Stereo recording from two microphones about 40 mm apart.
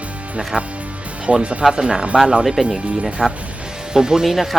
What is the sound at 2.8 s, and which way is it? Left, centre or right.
Speech, right.